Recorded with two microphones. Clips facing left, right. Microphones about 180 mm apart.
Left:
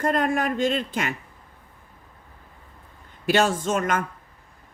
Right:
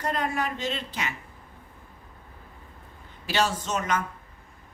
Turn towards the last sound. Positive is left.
turn(degrees=50)  # may be behind; listen again after turning